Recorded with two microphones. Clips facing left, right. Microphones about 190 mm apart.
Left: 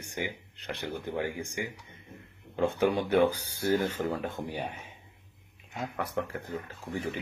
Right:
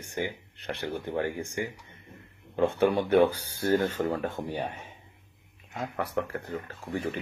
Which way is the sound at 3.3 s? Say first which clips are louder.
Right 2 dB; 15° left (ahead or behind).